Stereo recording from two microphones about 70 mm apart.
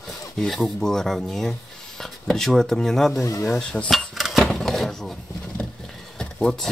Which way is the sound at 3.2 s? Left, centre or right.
Left.